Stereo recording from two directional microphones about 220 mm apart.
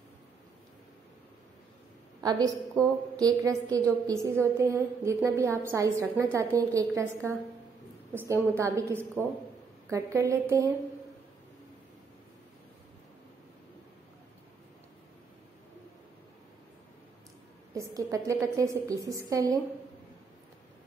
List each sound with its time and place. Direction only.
2.2 s a woman's voice: 15° right (ahead or behind)
17.7 s a woman's voice: 15° right (ahead or behind)